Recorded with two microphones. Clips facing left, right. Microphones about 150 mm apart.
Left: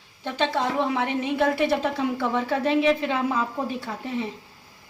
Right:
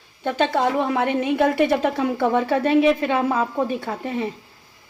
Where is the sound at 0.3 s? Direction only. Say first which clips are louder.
Right 5 dB; 55° right (ahead or behind).